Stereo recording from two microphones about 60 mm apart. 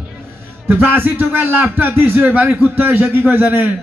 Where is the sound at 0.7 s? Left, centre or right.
Right.